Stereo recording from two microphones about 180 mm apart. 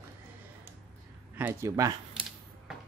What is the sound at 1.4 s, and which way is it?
Speech, 15° right (ahead or behind).